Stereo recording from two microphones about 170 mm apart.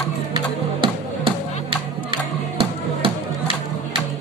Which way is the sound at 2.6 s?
30° right (ahead or behind).